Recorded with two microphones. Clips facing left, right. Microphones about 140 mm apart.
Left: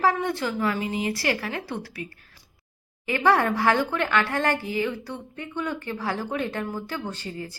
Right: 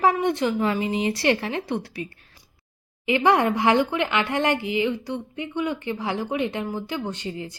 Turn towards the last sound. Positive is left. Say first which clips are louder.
# right 3 dB
turn(degrees=-20)  # may be behind; listen again after turning